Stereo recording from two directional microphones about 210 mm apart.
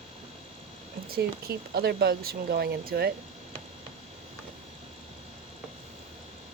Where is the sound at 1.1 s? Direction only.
45° right (ahead or behind).